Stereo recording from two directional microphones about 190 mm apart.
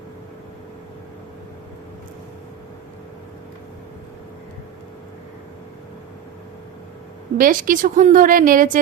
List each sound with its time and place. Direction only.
7.3 s a woman's voice: 45° right (ahead or behind)